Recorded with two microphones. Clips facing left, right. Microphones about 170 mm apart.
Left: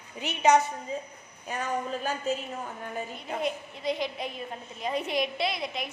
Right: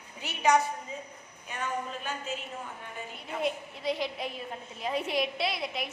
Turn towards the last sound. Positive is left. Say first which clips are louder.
# left 1 dB
turn(degrees=-5)  # may be behind; listen again after turning